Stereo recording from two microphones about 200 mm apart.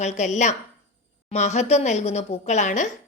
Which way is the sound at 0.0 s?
35° left (ahead or behind).